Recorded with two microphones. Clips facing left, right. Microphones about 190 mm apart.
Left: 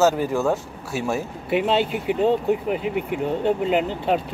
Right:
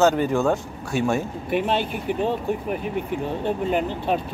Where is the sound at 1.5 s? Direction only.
20° left (ahead or behind).